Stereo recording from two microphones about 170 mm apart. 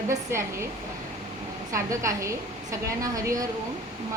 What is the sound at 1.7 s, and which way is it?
A woman's voice, 20° right (ahead or behind).